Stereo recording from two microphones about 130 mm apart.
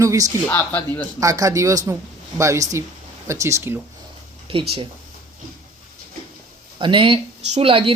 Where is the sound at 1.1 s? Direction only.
25° right (ahead or behind).